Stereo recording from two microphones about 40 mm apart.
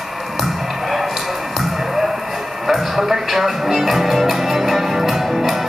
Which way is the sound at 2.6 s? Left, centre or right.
Centre.